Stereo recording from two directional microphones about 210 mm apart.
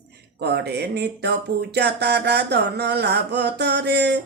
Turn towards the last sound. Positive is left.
turn(degrees=-55)  # may be behind; listen again after turning